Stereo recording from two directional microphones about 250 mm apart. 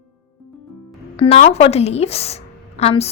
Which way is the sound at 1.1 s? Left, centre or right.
Left.